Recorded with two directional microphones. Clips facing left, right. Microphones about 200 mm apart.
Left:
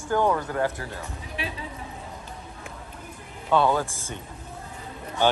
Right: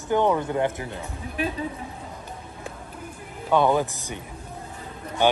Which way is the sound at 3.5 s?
15° right (ahead or behind).